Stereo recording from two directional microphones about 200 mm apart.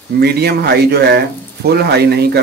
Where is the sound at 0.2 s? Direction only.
55° right (ahead or behind).